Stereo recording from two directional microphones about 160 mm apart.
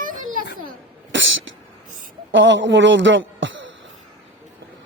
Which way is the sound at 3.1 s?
90° right.